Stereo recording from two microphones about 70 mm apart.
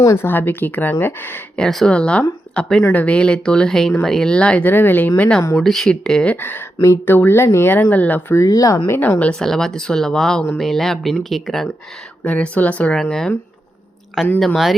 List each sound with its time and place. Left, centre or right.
0.0 s a woman's voice: left
0.3 s speech: left
1.5 s speech: centre
4.7 s speech: left
5.6 s speech: centre
6.3 s speech: left
8.4 s speech: left
9.0 s speech: left
9.3 s speech: centre
12.2 s speech: centre
13.0 s speech: centre
14.3 s speech: centre